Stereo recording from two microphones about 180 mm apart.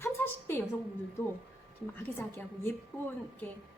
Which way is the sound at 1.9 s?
15° left (ahead or behind).